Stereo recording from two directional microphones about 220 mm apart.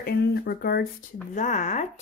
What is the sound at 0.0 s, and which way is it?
Speech, 45° left (ahead or behind).